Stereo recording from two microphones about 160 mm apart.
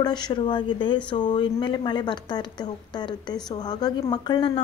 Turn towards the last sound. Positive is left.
turn(degrees=30)  # may be behind; listen again after turning